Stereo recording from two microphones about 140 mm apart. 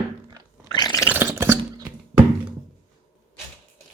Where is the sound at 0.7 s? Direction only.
30° left (ahead or behind).